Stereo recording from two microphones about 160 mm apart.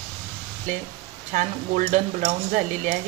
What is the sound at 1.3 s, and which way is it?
Stir, 50° right (ahead or behind).